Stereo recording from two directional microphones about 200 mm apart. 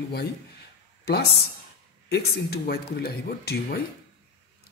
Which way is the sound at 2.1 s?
50° left (ahead or behind).